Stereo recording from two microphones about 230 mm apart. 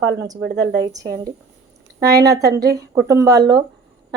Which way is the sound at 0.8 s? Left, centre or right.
Centre.